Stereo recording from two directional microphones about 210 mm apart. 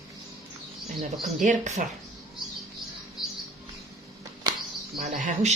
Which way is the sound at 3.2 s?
Centre (ahead or behind).